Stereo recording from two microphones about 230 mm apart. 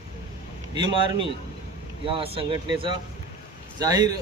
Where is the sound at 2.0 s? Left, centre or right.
Right.